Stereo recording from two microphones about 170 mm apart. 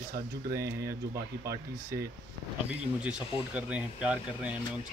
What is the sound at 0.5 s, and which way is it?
Speech, 15° right (ahead or behind).